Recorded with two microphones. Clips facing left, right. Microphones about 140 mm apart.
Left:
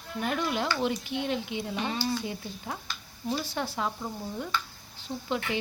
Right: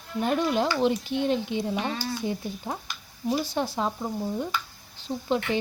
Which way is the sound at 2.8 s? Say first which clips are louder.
Right 4 dB; 15° right (ahead or behind).